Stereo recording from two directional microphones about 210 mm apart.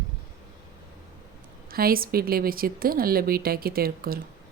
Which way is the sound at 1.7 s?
45° right (ahead or behind).